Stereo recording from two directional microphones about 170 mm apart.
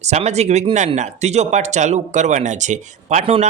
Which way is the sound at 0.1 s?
40° right (ahead or behind).